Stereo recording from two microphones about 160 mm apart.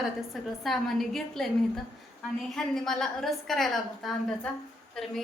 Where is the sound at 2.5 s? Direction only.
5° left (ahead or behind).